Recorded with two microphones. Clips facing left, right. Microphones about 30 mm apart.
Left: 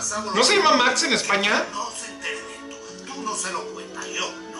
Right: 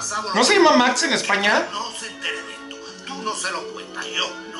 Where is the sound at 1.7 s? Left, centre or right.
Right.